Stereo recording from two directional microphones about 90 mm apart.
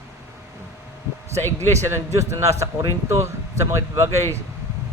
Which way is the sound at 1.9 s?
35° right (ahead or behind).